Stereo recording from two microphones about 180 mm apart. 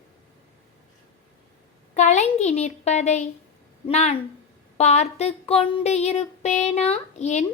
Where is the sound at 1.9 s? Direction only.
40° left (ahead or behind).